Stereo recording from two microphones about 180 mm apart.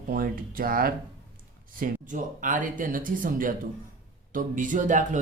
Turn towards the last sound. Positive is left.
turn(degrees=-45)  # may be behind; listen again after turning